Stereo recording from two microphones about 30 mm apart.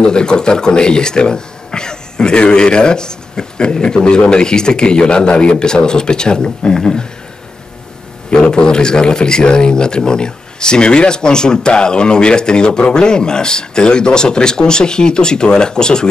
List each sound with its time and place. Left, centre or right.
0.0 s a man's voice: left
8.3 s speech: left